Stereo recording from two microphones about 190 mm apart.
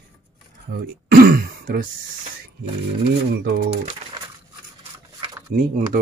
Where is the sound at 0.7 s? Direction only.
55° right (ahead or behind).